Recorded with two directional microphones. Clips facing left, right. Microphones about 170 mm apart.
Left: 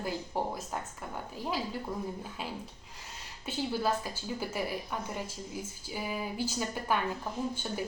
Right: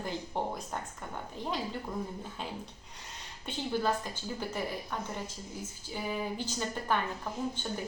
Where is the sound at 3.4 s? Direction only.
5° left (ahead or behind).